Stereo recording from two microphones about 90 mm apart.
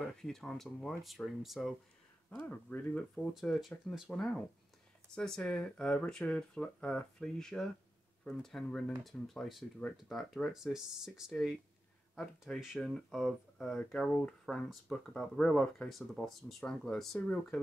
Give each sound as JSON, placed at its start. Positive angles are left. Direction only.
{"t": 0.2, "sound": "speech", "side_deg": 5}
{"t": 2.5, "sound": "speech", "side_deg": 20}
{"t": 3.3, "sound": "speech", "side_deg": 0}
{"t": 12.5, "sound": "speech", "side_deg": 10}